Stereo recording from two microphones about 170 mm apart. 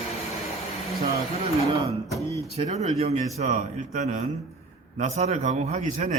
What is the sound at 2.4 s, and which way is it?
A man's voice, 35° right (ahead or behind).